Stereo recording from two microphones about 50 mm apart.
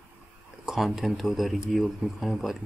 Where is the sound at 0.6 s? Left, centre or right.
Centre.